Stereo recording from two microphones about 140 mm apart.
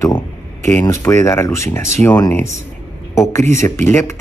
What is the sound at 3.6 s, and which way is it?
Speech, 15° left (ahead or behind).